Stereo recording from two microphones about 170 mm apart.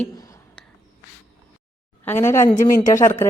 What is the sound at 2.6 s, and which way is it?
Speech, 50° left (ahead or behind).